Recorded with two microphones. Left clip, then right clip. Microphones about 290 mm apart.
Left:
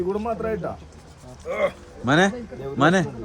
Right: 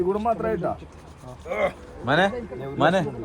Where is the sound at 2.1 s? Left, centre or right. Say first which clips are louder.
Left 1 dB; left.